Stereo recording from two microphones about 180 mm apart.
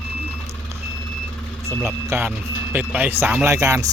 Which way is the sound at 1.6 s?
10° right (ahead or behind).